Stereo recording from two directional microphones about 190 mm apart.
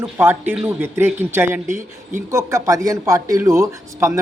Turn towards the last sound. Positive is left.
turn(degrees=-15)  # may be behind; listen again after turning